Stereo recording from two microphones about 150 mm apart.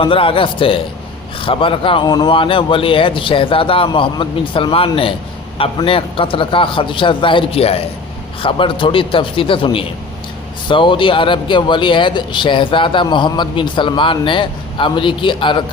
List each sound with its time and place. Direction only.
0.0 s a man's voice: 35° left (ahead or behind)